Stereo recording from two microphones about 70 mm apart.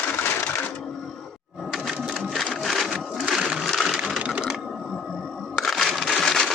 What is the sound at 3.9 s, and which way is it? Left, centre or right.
Sewing machine, centre.